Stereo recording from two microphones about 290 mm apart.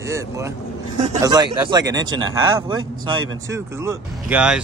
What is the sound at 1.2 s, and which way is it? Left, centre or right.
Speech, centre.